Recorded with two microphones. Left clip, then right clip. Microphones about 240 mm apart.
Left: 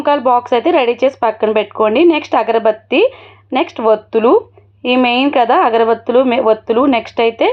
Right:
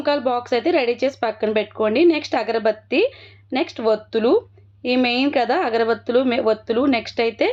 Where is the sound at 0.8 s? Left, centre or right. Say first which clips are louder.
Left 7 dB; centre.